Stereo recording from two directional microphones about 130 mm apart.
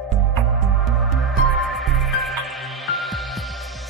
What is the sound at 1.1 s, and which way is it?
Music, centre (ahead or behind).